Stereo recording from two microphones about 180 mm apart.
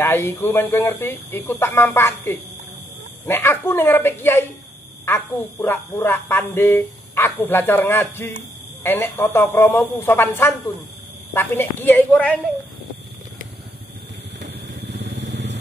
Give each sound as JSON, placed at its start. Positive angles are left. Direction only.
{"t": 0.0, "sound": "speech", "side_deg": 10}
{"t": 14.4, "sound": "vehicle", "side_deg": -70}